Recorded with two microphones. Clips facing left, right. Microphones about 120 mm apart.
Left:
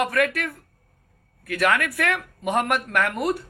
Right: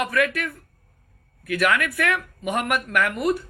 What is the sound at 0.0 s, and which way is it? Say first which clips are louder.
A woman's voice: left 1 dB; 40° left (ahead or behind).